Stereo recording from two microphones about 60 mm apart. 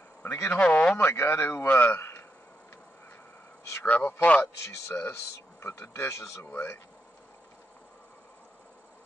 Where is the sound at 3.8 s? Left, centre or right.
Left.